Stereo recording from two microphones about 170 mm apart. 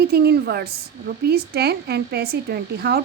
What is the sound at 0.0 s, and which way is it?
A woman's voice, 70° right (ahead or behind).